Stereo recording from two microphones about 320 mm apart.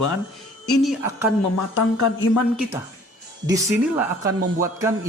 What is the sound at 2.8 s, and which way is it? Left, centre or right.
Speech, centre.